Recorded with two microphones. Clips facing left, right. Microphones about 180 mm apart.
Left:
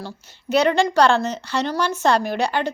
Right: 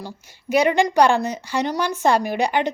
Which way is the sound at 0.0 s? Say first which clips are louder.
Left 1 dB; 10° right (ahead or behind).